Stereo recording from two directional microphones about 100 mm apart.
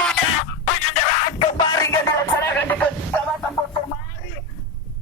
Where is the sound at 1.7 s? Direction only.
30° left (ahead or behind).